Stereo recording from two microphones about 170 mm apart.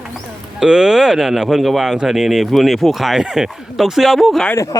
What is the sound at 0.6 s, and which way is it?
Speech, 5° right (ahead or behind).